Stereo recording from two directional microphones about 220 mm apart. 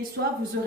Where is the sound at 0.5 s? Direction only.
50° right (ahead or behind).